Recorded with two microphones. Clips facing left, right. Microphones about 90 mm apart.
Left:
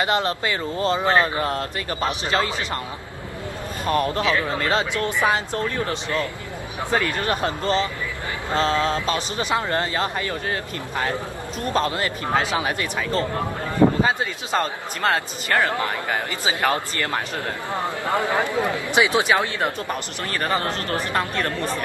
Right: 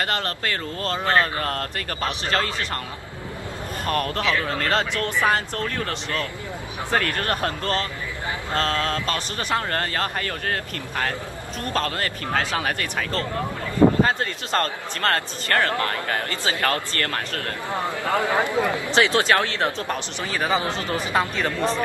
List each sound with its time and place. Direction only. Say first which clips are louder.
0.0 s speech: left 4 dB; 15° left (ahead or behind)
3.8 s speech: left 3 dB; 10° left (ahead or behind)
18.3 s speech: even; 20° right (ahead or behind)
18.7 s speech: even; 15° left (ahead or behind); by 20.6 s 5° right (ahead or behind)
20.8 s speech: left 1 dB; 80° left
21.1 s speech: right 3 dB; 5° right (ahead or behind)